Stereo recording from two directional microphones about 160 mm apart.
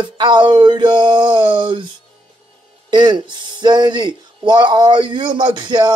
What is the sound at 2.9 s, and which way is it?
Speech, 30° right (ahead or behind).